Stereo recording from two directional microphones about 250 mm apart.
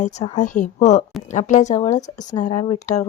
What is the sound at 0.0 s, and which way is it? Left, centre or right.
A woman's voice, left.